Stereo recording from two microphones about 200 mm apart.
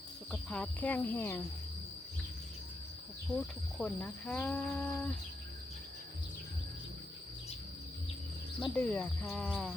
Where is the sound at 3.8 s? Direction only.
5° left (ahead or behind).